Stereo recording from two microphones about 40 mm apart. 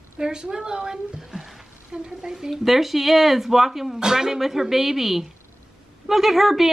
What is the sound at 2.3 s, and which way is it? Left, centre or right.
Speech, centre.